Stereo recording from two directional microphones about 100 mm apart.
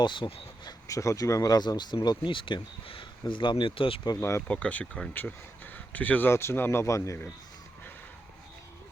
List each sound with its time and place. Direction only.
0.0 s speech: 55° left (ahead or behind)
0.9 s speech: 35° left (ahead or behind); by 4.0 s 65° left (ahead or behind)
4.2 s speech: 25° left (ahead or behind)
4.4 s speech: 15° left (ahead or behind); by 7.2 s 30° left (ahead or behind)